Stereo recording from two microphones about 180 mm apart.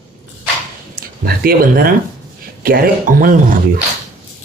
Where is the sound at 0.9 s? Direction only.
55° right (ahead or behind).